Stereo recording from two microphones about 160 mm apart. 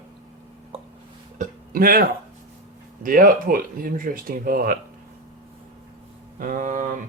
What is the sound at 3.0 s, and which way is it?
Speech, 60° right (ahead or behind).